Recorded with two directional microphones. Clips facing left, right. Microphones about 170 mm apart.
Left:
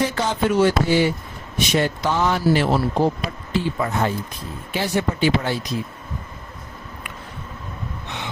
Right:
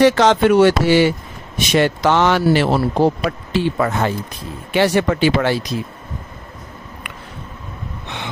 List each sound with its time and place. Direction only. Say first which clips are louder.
0.0 s speech: right 9 dB; 85° right